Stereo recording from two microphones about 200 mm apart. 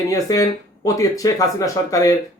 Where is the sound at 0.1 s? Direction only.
15° left (ahead or behind).